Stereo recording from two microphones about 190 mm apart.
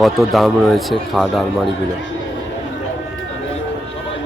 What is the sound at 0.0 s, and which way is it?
Speech, centre (ahead or behind).